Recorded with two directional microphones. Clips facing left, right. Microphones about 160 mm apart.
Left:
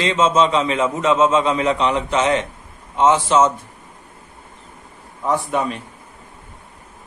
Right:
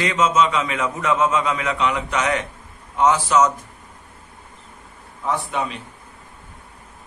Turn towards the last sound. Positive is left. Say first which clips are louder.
# left 4 dB
turn(degrees=45)  # may be behind; listen again after turning